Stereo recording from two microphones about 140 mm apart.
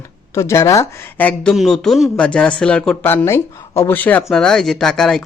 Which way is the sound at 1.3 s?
5° left (ahead or behind).